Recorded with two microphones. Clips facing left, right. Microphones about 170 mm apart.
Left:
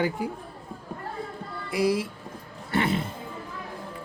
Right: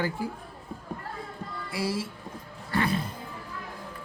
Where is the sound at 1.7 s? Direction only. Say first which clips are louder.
Left 7 dB; 20° left (ahead or behind).